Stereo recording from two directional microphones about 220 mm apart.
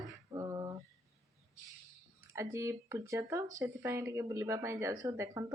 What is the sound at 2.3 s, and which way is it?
Speech, 15° right (ahead or behind).